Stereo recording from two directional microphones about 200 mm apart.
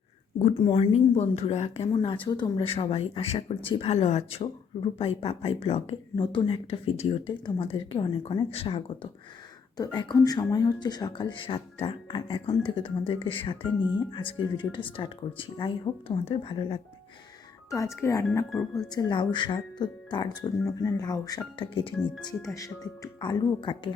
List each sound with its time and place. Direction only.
0.5 s speech: 25° left (ahead or behind)
17.7 s speech: 15° left (ahead or behind)